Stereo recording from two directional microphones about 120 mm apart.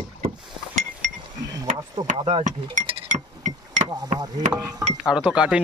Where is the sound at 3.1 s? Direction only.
90° right.